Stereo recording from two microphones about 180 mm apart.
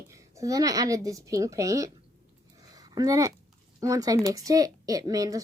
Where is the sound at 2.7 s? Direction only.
20° right (ahead or behind).